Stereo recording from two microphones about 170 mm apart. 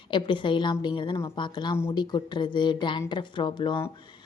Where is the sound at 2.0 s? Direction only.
25° left (ahead or behind).